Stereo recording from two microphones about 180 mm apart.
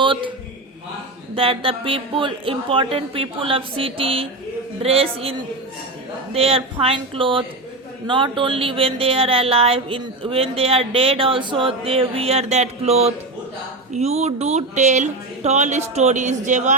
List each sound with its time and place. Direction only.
0.0 s a sound: 25° right (ahead or behind)
1.4 s speech: 30° right (ahead or behind)
6.3 s speech: 35° right (ahead or behind)